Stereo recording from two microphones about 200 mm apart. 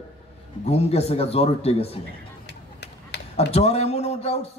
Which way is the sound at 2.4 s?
55° left (ahead or behind).